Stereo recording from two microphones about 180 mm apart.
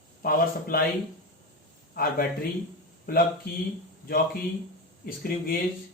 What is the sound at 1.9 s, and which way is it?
Speech, 55° left (ahead or behind).